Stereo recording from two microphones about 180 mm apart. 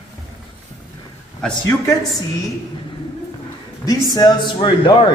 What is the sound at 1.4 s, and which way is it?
Speech, 15° left (ahead or behind).